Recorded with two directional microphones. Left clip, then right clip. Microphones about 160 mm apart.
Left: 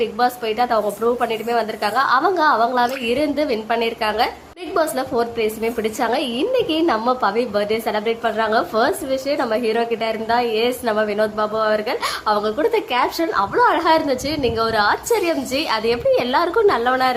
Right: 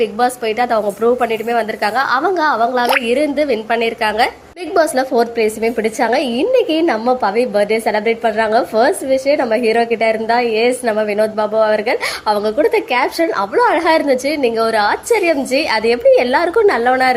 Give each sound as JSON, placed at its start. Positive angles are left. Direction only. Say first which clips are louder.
{"t": 0.0, "sound": "a woman's voice", "louder": "right 4 dB", "side_deg": -20}